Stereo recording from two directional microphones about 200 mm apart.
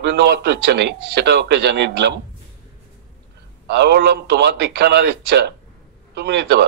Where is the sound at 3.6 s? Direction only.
55° right (ahead or behind).